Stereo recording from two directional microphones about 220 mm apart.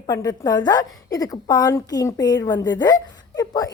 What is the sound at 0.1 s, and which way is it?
A woman's voice, 15° left (ahead or behind).